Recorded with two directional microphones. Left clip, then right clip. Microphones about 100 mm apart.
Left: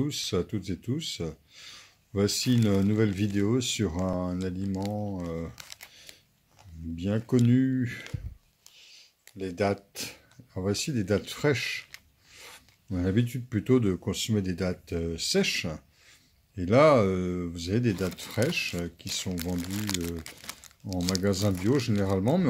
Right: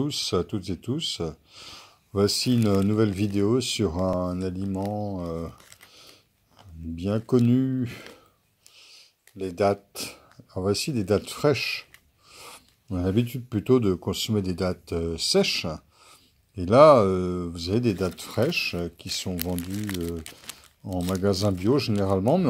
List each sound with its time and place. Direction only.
0.0 s speech: 30° right (ahead or behind)
4.9 s speech: 20° right (ahead or behind)
7.0 s speech: 30° right (ahead or behind)
20.8 s speech: 30° right (ahead or behind)